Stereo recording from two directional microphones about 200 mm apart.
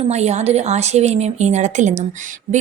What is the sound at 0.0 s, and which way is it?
A woman's voice, 35° right (ahead or behind).